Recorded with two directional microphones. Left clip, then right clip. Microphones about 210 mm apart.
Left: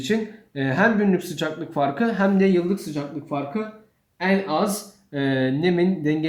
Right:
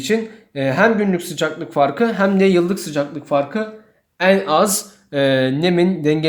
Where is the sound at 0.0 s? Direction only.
25° right (ahead or behind).